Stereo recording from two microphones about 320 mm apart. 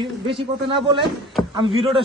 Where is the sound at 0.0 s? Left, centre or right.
Centre.